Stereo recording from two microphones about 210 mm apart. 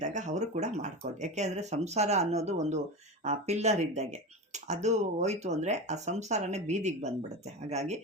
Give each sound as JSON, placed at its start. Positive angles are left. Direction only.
{"t": 0.0, "sound": "speech", "side_deg": -35}